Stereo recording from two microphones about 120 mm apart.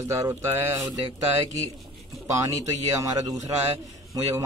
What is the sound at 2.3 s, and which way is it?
A man's voice, 30° right (ahead or behind).